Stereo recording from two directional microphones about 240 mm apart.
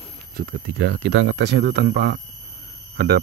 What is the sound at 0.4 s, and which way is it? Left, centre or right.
Speech, right.